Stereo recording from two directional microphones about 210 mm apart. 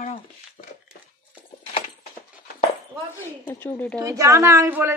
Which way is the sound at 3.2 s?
10° left (ahead or behind).